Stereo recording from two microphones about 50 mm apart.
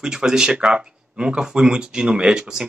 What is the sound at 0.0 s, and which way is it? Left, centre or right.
Speech, centre.